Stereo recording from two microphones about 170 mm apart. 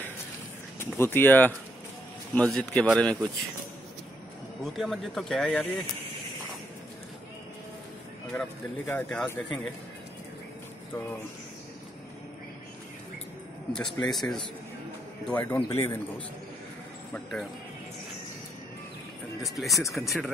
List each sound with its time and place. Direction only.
0.7 s speech: 15° left (ahead or behind)
4.7 s speech: centre (ahead or behind)
8.8 s speech: 10° left (ahead or behind)
13.7 s speech: 5° left (ahead or behind)
17.1 s speech: centre (ahead or behind)
19.4 s speech: centre (ahead or behind)